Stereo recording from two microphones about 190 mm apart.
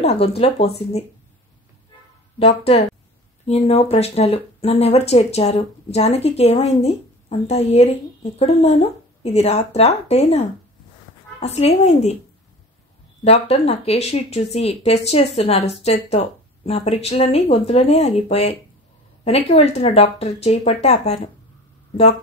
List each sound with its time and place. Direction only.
0.0 s speech: 30° left (ahead or behind)
2.3 s speech: 30° left (ahead or behind)
13.2 s speech: 30° left (ahead or behind)